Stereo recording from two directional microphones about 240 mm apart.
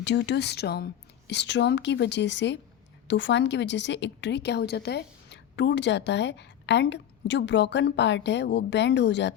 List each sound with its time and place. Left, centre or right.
0.0 s a woman's voice: left